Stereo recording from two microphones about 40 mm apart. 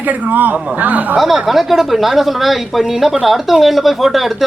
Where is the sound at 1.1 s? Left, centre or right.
Centre.